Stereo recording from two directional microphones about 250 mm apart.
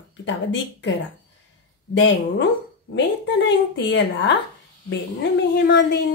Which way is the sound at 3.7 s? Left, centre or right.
Left.